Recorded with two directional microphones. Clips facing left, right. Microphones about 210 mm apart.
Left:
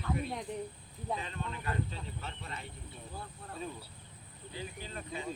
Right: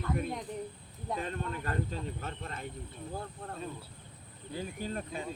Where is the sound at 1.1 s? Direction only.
50° right (ahead or behind).